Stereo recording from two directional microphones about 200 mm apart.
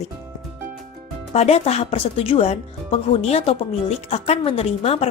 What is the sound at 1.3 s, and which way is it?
A woman's voice, 30° left (ahead or behind).